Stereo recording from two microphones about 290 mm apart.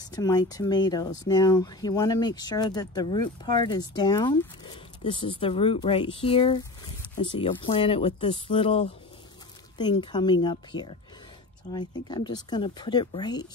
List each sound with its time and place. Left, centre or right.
0.0 s speech: centre